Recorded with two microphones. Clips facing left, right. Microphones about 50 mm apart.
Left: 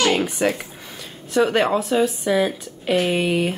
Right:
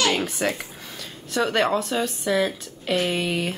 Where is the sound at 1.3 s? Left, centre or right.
Centre.